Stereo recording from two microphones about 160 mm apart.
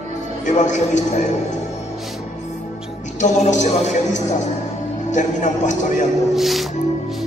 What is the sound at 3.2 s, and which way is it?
Speech, 50° left (ahead or behind).